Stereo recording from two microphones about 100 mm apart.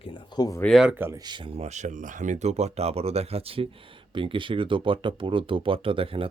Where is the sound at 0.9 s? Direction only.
25° right (ahead or behind).